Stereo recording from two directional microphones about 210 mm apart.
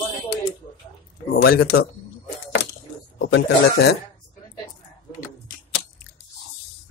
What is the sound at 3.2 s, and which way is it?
Speech, 55° left (ahead or behind).